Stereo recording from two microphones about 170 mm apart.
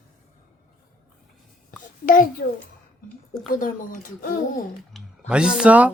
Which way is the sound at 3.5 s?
55° left (ahead or behind).